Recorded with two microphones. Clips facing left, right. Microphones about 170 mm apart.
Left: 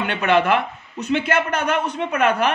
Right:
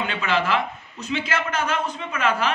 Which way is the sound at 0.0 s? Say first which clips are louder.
Left 6 dB; 60° left (ahead or behind).